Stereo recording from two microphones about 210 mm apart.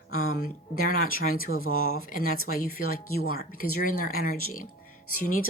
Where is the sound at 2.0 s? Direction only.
40° left (ahead or behind).